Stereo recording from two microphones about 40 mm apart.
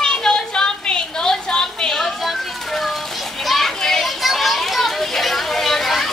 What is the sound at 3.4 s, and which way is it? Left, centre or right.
Children playing, centre.